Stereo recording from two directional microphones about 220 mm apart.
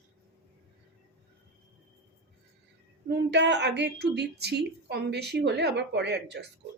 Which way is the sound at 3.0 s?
50° right (ahead or behind).